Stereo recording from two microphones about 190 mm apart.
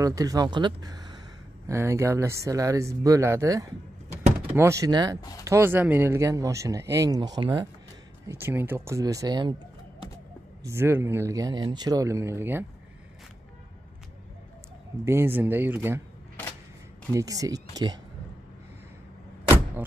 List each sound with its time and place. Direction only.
0.0 s speech: 20° right (ahead or behind)
8.3 s speech: 10° right (ahead or behind)
10.6 s speech: 15° right (ahead or behind)
15.0 s speech: 10° right (ahead or behind)
17.1 s speech: 20° right (ahead or behind)